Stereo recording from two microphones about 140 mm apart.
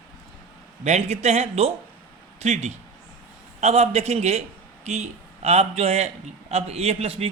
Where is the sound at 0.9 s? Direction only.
50° right (ahead or behind).